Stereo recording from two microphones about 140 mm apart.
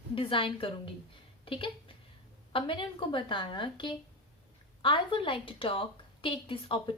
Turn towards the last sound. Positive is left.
turn(degrees=35)  # may be behind; listen again after turning